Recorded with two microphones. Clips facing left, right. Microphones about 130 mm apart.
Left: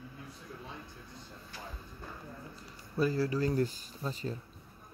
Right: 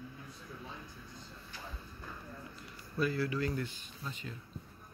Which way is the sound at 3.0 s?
35° left (ahead or behind).